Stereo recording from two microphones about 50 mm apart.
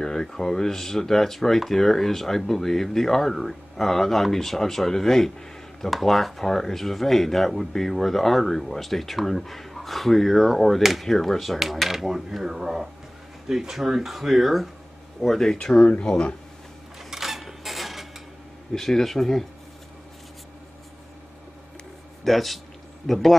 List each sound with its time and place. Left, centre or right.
0.0 s speech: centre
15.2 s speech: centre
15.5 s speech: left
17.0 s a sound: centre
18.7 s speech: centre
22.2 s a man's voice: centre